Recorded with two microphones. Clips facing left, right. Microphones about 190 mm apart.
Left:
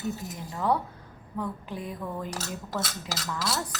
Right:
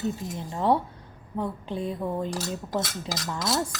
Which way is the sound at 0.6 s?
25° right (ahead or behind).